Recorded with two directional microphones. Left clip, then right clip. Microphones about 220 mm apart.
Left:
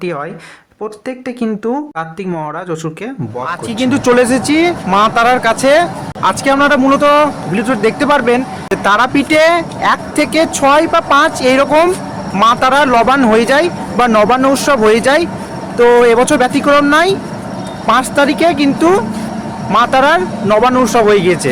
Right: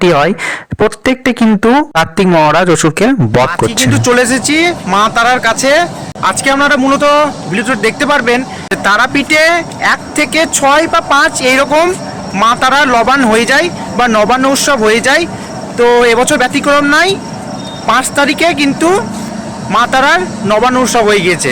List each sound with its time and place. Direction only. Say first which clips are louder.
0.0 s speech: right 12 dB; 40° right (ahead or behind)
3.8 s speech: left 2 dB; centre (ahead or behind)